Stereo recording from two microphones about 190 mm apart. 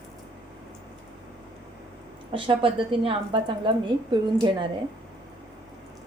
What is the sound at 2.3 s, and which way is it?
A woman's voice, 25° right (ahead or behind).